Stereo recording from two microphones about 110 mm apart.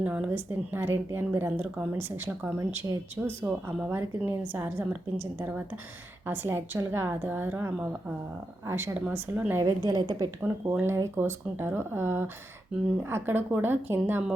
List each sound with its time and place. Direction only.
0.0 s a woman's voice: 15° right (ahead or behind); by 10.2 s 35° right (ahead or behind)
10.7 s a woman's voice: 20° right (ahead or behind)